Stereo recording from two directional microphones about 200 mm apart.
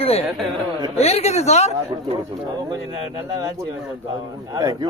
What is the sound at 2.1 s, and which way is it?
Speech, 20° right (ahead or behind).